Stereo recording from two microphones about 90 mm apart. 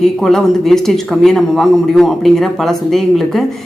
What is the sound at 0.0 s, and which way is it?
A man's voice, 5° left (ahead or behind).